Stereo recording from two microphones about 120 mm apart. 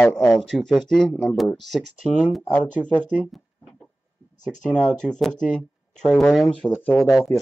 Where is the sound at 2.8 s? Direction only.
10° left (ahead or behind).